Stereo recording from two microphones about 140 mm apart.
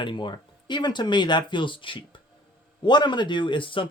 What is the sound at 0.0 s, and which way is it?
Speech, 35° left (ahead or behind).